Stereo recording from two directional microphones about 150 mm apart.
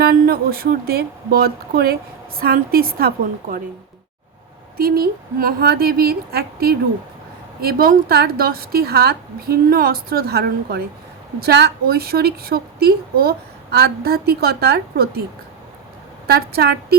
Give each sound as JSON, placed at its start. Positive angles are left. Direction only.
{"t": 0.0, "sound": "a woman's voice", "side_deg": -85}
{"t": 4.8, "sound": "a woman's voice", "side_deg": -80}
{"t": 16.2, "sound": "a woman's voice", "side_deg": -90}